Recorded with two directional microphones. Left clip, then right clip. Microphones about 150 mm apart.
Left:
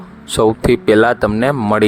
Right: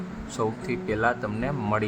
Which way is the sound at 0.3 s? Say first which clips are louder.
Left 16 dB; 70° left (ahead or behind).